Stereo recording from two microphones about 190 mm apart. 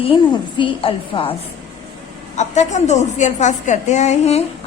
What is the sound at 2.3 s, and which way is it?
A woman's voice, 40° left (ahead or behind).